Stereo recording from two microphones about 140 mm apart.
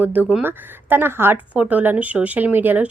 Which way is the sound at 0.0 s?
10° right (ahead or behind).